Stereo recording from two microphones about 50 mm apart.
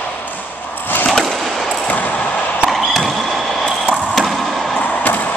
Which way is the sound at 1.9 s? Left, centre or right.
Left.